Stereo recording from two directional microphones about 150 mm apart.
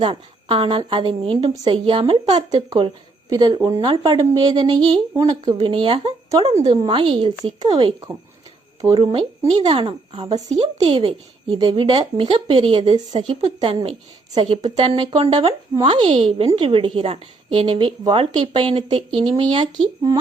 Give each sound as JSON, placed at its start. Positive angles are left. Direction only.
{"t": 0.0, "sound": "speech", "side_deg": -35}
{"t": 8.8, "sound": "speech", "side_deg": -25}
{"t": 10.5, "sound": "speech", "side_deg": -40}